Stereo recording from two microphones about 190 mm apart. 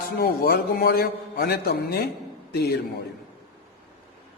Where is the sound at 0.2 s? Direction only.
55° left (ahead or behind).